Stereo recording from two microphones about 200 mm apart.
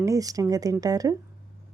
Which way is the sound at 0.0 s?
15° right (ahead or behind).